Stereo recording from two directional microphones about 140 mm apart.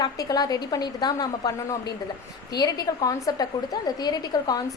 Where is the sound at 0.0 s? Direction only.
25° left (ahead or behind).